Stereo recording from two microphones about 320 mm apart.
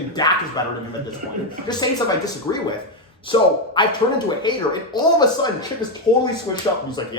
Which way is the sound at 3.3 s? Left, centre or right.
Centre.